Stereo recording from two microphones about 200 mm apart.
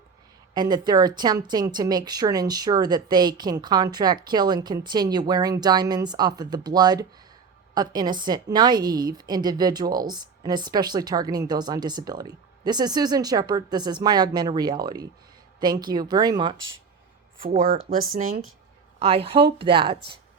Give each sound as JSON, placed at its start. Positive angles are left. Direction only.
{"t": 0.5, "sound": "a woman's voice", "side_deg": -20}
{"t": 18.2, "sound": "speech", "side_deg": -90}
{"t": 18.9, "sound": "a woman's voice", "side_deg": -30}